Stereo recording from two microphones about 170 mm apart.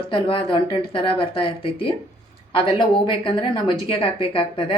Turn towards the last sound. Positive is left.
turn(degrees=30)  # may be behind; listen again after turning